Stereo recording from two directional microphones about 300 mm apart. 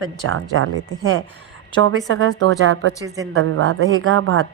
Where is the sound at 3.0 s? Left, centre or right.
Centre.